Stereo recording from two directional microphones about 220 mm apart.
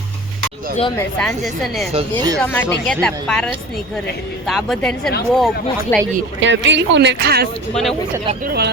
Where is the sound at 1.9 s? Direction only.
25° right (ahead or behind).